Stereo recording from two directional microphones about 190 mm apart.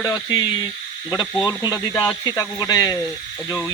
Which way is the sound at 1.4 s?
20° left (ahead or behind).